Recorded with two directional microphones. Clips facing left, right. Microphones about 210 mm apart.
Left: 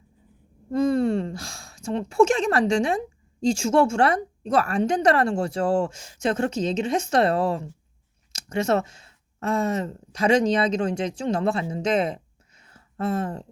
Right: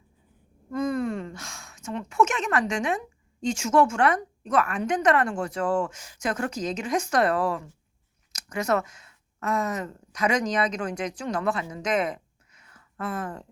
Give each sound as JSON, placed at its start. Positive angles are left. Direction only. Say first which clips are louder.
{"t": 0.7, "sound": "a woman's voice", "louder": "left 6 dB", "side_deg": 30}